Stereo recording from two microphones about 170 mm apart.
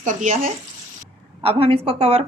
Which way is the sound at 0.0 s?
45° right (ahead or behind).